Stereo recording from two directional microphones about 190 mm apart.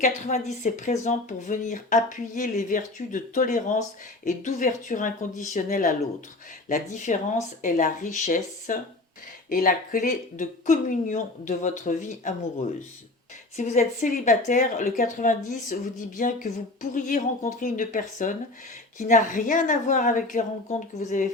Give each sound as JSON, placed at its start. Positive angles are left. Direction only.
{"t": 0.0, "sound": "speech", "side_deg": 40}
{"t": 13.6, "sound": "speech", "side_deg": 40}